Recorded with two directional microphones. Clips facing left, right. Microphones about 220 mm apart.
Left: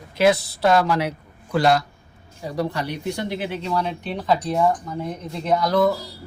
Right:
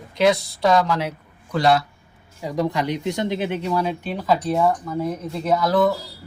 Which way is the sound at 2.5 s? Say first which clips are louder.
Right 3 dB; 15° right (ahead or behind).